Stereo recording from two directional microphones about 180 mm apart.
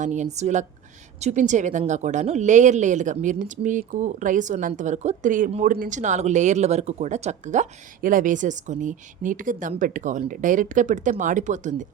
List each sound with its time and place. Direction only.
0.0 s speech: 45° right (ahead or behind)